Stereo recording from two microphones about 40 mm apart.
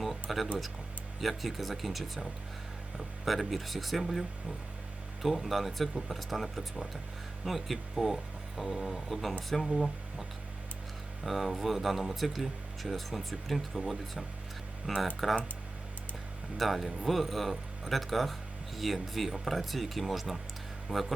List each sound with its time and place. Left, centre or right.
0.0 s music: centre
1.2 s speech: centre
16.6 s speech: centre
20.9 s speech: right